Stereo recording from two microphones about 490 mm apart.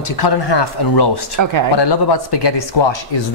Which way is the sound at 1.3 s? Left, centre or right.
Right.